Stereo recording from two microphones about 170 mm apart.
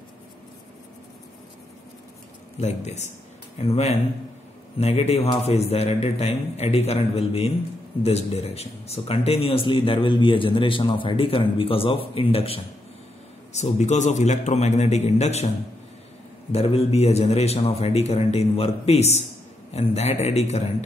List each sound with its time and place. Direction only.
2.6 s speech: 40° left (ahead or behind)
16.5 s speech: 35° left (ahead or behind)